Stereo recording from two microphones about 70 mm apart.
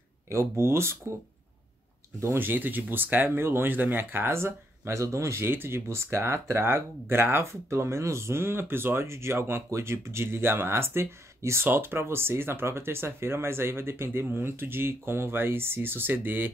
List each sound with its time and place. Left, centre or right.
0.3 s speech: right
2.3 s speech: right